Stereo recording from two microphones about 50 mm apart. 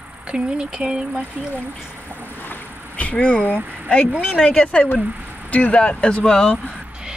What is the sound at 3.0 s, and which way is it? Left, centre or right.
Speech, left.